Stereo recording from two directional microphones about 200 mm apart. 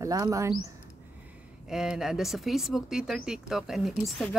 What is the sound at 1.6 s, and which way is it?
Speech, 5° right (ahead or behind).